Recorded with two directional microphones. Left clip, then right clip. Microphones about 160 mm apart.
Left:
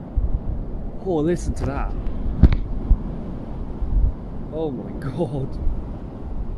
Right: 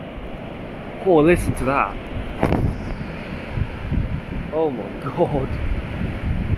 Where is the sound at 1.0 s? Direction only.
15° left (ahead or behind).